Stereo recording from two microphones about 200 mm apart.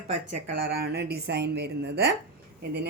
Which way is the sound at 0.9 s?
55° right (ahead or behind).